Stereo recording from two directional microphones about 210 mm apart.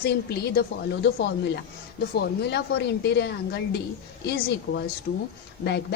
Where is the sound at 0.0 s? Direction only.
50° left (ahead or behind).